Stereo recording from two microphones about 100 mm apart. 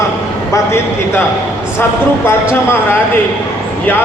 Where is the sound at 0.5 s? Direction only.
25° left (ahead or behind).